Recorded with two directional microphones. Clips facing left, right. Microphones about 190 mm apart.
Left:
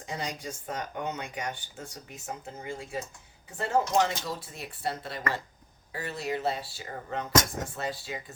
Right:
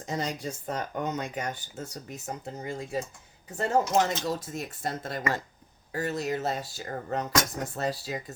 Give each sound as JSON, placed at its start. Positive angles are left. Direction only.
{"t": 0.0, "sound": "speech", "side_deg": -40}